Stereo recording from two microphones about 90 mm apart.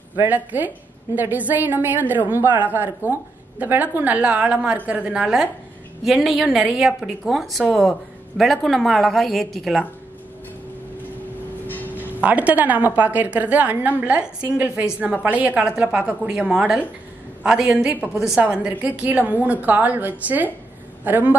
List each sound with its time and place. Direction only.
0.1 s a woman's voice: 20° right (ahead or behind); by 9.8 s centre (ahead or behind)
11.6 s a sound: 20° left (ahead or behind)
12.0 s a woman's voice: 20° right (ahead or behind)